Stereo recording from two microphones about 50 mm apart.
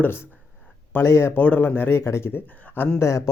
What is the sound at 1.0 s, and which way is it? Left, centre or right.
Speech, left.